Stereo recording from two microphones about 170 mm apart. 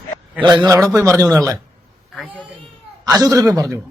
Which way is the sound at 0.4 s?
25° right (ahead or behind).